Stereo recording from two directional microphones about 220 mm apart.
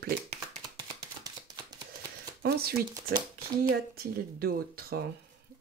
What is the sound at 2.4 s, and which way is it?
Speech, 45° right (ahead or behind).